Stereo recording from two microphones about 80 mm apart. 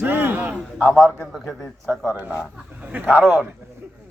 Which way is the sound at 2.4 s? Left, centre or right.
Centre.